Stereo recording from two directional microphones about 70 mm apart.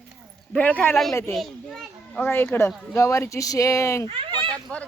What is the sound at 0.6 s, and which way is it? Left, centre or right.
Speech, left.